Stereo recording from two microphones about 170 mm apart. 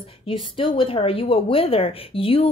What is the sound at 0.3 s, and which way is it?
A woman's voice, 30° left (ahead or behind).